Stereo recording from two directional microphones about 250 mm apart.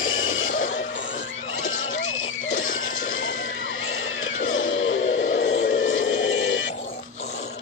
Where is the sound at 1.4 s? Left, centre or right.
Left.